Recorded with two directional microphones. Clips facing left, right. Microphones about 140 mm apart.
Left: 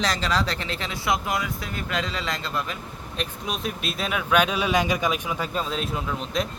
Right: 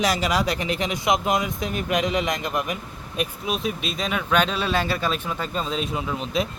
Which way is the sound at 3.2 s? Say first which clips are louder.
Right 4 dB; 5° right (ahead or behind).